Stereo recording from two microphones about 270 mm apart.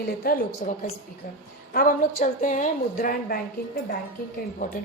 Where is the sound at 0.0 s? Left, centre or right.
Left.